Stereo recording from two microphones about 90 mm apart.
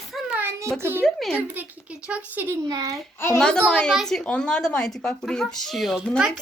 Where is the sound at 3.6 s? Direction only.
10° left (ahead or behind).